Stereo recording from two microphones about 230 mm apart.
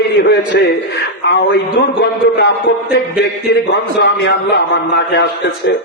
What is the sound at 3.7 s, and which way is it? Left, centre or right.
A man's voice, left.